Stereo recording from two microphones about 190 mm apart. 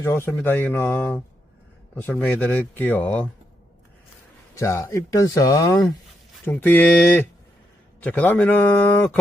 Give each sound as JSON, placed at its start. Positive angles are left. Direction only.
{"t": 0.0, "sound": "speech", "side_deg": 15}
{"t": 4.5, "sound": "speech", "side_deg": 15}